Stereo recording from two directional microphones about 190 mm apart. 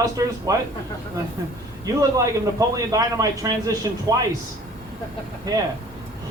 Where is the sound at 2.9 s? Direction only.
20° right (ahead or behind).